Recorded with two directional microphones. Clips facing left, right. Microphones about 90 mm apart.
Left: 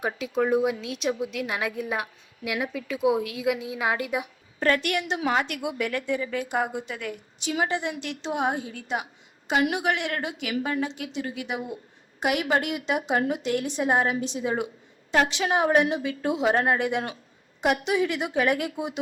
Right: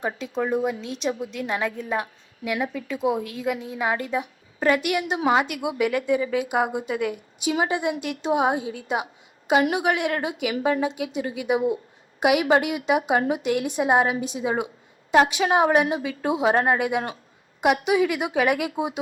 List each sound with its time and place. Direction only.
0.0 s a woman's voice: 5° left (ahead or behind)
4.6 s a woman's voice: 15° right (ahead or behind)